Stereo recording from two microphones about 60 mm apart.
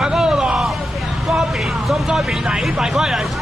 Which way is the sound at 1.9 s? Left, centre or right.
Centre.